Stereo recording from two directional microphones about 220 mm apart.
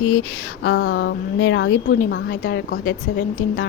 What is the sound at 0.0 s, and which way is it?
A woman's voice, 75° left (ahead or behind).